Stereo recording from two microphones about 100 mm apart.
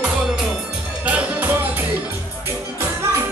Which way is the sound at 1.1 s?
15° right (ahead or behind).